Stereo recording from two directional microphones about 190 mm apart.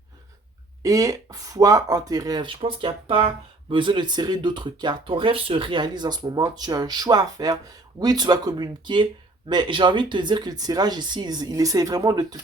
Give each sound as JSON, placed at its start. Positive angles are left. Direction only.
{"t": 0.8, "sound": "speech", "side_deg": -20}